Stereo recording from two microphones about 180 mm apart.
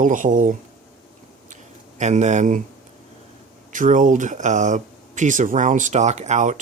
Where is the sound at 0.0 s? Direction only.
45° right (ahead or behind).